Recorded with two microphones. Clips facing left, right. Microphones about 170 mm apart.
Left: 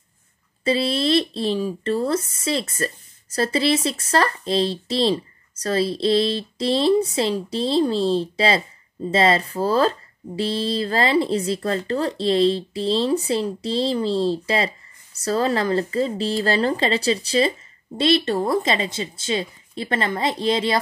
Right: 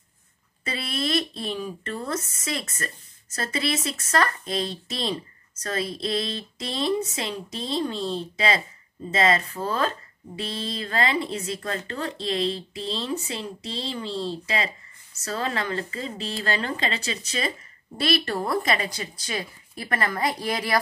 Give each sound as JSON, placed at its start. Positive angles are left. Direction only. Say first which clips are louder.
{"t": 0.7, "sound": "speech", "louder": "left 9 dB", "side_deg": 30}